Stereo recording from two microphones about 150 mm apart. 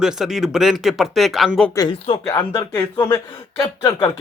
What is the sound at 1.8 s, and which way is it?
Speech, 35° left (ahead or behind).